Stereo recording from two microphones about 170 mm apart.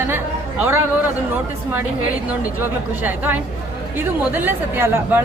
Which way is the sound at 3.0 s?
10° right (ahead or behind).